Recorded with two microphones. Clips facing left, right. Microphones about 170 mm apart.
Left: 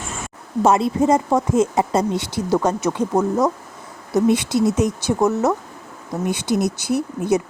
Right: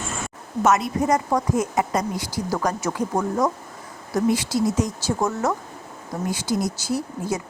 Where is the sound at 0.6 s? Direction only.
30° left (ahead or behind).